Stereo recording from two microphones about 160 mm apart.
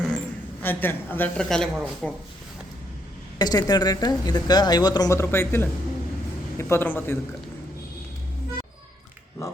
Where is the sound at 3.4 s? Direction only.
25° left (ahead or behind).